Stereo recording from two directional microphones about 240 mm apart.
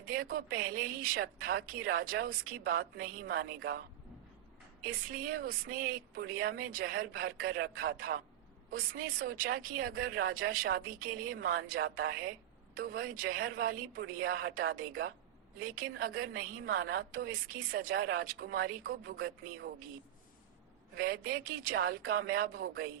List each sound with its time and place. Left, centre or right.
0.0 s a woman's voice: right
4.8 s speech: right
20.9 s speech: right